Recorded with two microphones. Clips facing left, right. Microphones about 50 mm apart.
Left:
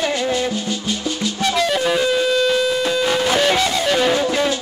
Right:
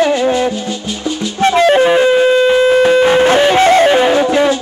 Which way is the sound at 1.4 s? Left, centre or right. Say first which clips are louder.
Right 10 dB; right.